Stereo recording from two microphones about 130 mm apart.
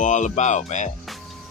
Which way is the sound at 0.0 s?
70° left (ahead or behind).